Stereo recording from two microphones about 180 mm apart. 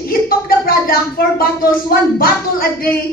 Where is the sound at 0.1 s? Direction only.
55° left (ahead or behind).